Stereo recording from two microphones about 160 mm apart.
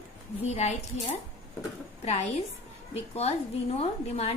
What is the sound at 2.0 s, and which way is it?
A woman's voice, 45° left (ahead or behind).